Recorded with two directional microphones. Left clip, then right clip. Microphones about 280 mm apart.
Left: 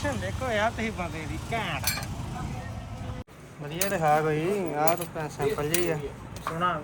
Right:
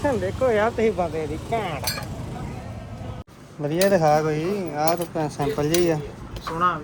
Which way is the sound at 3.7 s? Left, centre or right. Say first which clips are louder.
Right 6 dB; centre.